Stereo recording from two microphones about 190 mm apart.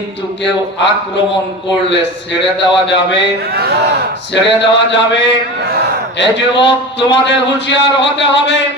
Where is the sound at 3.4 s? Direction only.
55° right (ahead or behind).